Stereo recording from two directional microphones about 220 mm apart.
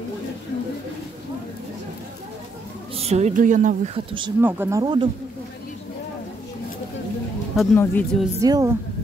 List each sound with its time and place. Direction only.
3.0 s a woman's voice: 30° right (ahead or behind)
4.4 s speech: 10° right (ahead or behind)
7.7 s speech: 10° left (ahead or behind)
8.4 s speech: 15° right (ahead or behind)